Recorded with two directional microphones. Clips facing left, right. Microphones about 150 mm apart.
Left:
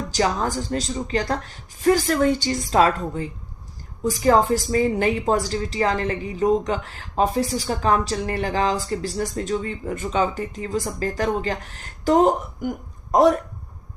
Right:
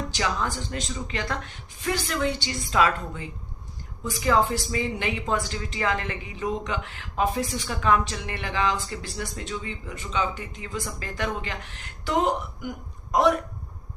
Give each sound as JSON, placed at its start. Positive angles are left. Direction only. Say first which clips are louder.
{"t": 0.1, "sound": "a woman's voice", "louder": "left 10 dB", "side_deg": 40}